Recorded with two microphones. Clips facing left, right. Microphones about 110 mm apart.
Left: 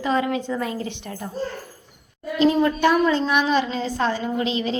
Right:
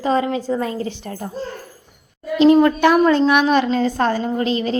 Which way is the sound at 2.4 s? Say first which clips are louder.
Right 6 dB; 70° right (ahead or behind).